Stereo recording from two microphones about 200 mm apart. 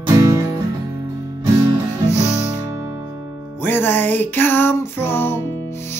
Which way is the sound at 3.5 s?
10° left (ahead or behind).